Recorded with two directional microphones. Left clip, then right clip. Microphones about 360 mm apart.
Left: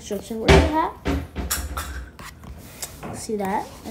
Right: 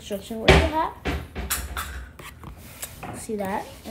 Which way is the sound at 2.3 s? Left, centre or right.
Centre.